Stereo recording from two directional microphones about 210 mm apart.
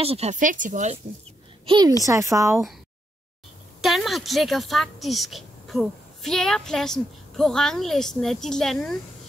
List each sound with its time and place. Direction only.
0.0 s speech: 30° right (ahead or behind)
1.7 s a woman's voice: 20° right (ahead or behind)
3.8 s a woman's voice: centre (ahead or behind)